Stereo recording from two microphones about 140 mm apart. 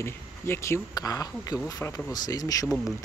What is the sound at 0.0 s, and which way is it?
Speech, 20° left (ahead or behind).